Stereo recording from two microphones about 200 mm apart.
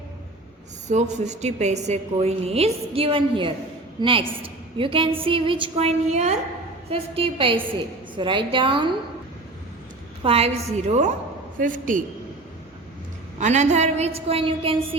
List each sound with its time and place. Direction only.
0.9 s a woman's voice: 35° right (ahead or behind)
10.2 s a woman's voice: 30° right (ahead or behind)
13.4 s a woman's voice: 35° right (ahead or behind)